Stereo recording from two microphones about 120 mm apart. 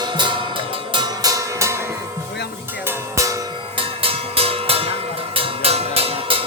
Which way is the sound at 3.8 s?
50° right (ahead or behind).